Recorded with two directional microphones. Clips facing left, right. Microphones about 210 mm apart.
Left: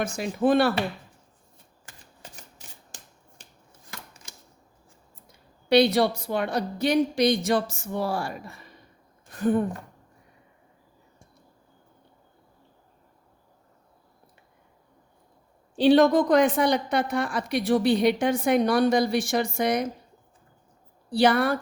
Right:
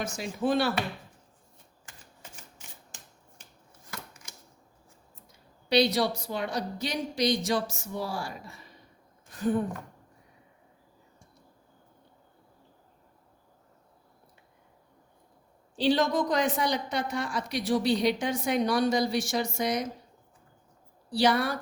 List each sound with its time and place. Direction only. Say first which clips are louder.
0.0 s a woman's voice: left 6 dB; 55° left (ahead or behind)
2.3 s shuffling cards: left 2 dB; 35° left (ahead or behind)
5.6 s a woman's voice: left 5 dB; 55° left (ahead or behind)
15.7 s a woman's voice: left 8 dB; 55° left (ahead or behind)
21.1 s a woman's voice: left 4 dB; 55° left (ahead or behind)